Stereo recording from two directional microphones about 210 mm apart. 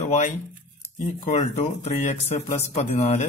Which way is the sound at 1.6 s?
35° left (ahead or behind).